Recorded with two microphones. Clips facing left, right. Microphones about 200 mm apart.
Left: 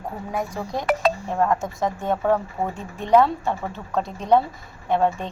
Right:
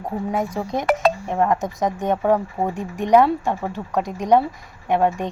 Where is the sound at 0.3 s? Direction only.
20° right (ahead or behind).